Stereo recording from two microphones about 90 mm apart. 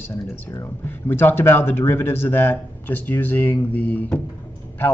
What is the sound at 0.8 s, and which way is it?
A man's voice, 25° left (ahead or behind).